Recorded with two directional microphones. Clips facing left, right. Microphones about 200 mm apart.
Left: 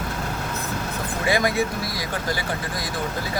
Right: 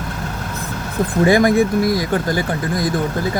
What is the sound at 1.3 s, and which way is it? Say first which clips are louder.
Speech: right 7 dB; 50° right (ahead or behind).